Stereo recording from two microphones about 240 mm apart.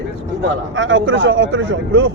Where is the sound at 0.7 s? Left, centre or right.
Right.